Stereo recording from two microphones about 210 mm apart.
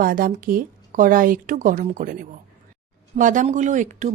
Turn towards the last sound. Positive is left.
turn(degrees=-35)  # may be behind; listen again after turning